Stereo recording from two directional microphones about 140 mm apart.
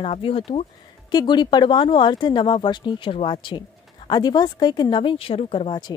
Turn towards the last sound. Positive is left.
turn(degrees=30)  # may be behind; listen again after turning